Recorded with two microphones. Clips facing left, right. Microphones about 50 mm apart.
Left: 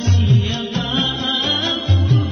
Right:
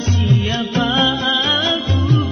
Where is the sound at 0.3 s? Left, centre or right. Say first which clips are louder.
Right 2 dB; right.